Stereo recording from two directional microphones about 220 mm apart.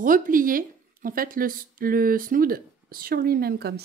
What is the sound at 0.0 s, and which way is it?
Speech, 40° right (ahead or behind).